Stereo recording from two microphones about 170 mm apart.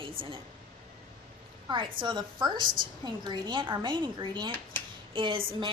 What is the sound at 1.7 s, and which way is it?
A woman's voice, 30° right (ahead or behind).